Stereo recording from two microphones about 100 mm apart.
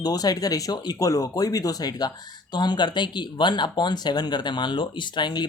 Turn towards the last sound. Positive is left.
turn(degrees=50)  # may be behind; listen again after turning